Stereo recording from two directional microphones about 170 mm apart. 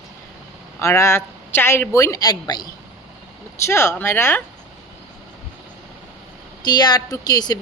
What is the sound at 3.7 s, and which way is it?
Speech, 15° left (ahead or behind).